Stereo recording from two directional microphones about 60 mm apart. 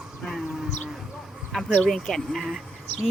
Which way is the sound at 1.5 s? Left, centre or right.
Centre.